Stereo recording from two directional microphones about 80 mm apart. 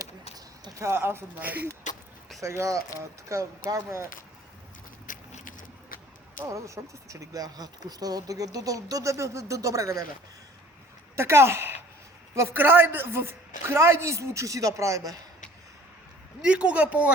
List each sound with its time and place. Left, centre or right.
0.0 s a sound: right
0.8 s speech: right
2.4 s a man's voice: right
3.8 s a man's voice: right
6.5 s speech: right
11.1 s a man's voice: right
12.5 s a man's voice: right
16.4 s speech: centre